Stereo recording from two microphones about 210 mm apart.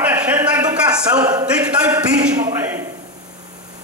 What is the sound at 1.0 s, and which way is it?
Speech, 20° right (ahead or behind).